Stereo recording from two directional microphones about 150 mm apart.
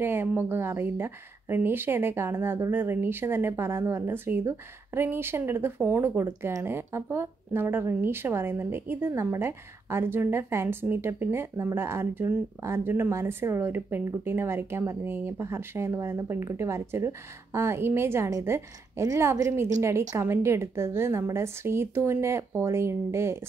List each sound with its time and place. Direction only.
0.0 s speech: 15° right (ahead or behind)